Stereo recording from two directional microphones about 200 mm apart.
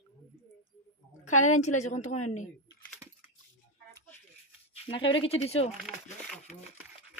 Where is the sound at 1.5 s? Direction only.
35° left (ahead or behind).